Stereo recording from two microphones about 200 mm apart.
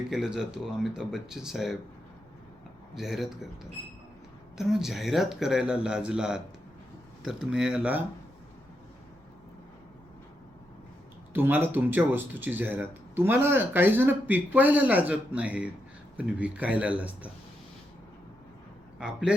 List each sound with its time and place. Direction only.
0.1 s speech: 5° right (ahead or behind)
2.9 s speech: centre (ahead or behind)
11.3 s speech: 10° right (ahead or behind)
18.9 s speech: 5° right (ahead or behind)